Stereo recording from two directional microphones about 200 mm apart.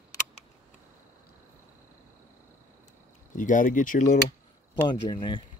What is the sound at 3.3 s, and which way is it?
Speech, 40° left (ahead or behind).